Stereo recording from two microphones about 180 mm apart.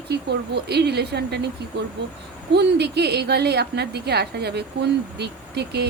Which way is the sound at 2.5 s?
65° right (ahead or behind).